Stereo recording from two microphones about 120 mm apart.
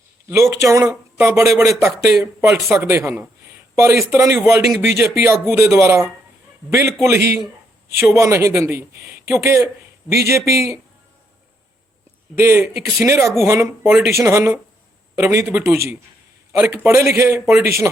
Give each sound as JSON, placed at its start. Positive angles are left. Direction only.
{"t": 0.6, "sound": "speech", "side_deg": -25}
{"t": 12.4, "sound": "a man's voice", "side_deg": -20}